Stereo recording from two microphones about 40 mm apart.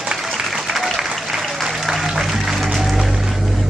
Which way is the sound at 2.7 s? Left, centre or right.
Centre.